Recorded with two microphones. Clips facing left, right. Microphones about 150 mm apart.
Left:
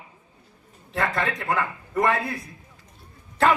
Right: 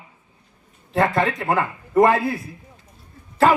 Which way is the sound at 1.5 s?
25° right (ahead or behind).